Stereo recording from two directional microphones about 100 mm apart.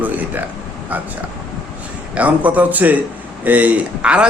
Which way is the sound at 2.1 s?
15° right (ahead or behind).